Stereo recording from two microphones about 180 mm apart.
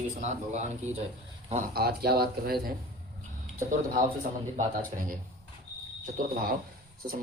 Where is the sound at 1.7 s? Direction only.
60° right (ahead or behind).